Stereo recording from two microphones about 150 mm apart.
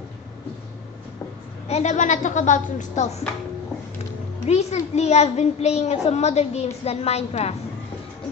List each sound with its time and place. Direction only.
1.7 s a child's voice: 50° left (ahead or behind)
4.5 s a child's voice: 45° left (ahead or behind)